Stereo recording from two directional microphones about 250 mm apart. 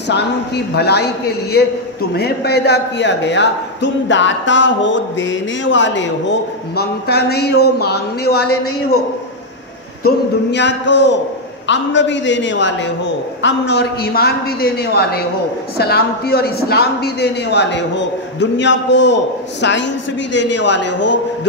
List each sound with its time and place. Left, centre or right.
0.1 s a man's voice: left
8.5 s a man's voice: left
10.5 s a man's voice: left
20.5 s speech: left